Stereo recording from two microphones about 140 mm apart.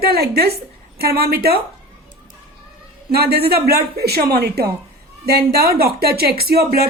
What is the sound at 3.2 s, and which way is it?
Speech, 90° right.